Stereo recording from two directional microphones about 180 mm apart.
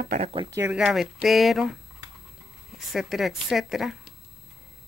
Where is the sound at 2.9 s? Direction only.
Centre (ahead or behind).